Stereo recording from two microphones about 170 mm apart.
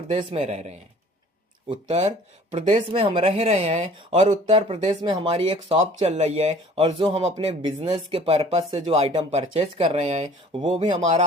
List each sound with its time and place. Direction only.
0.1 s speech: 30° right (ahead or behind)
5.7 s speech: 40° right (ahead or behind)
6.8 s speech: 30° right (ahead or behind)